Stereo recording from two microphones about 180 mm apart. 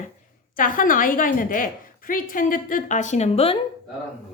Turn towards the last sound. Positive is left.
turn(degrees=35)  # may be behind; listen again after turning